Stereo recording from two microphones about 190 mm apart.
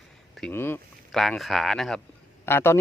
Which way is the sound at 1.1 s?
Centre (ahead or behind).